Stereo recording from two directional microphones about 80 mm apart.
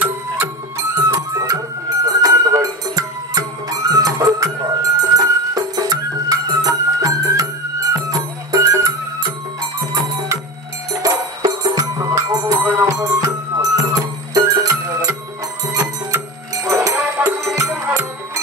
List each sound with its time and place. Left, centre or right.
0.7 s music: right
2.0 s music: right
12.3 s music: right
12.7 s music: right